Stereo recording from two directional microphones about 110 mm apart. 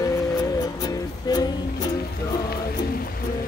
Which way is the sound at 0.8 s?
35° left (ahead or behind).